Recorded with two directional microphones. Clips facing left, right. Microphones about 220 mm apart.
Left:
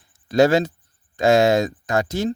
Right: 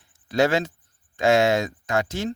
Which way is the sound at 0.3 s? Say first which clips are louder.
Left 5 dB; 40° left (ahead or behind).